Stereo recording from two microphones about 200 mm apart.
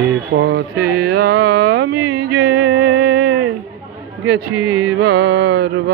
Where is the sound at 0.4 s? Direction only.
55° right (ahead or behind).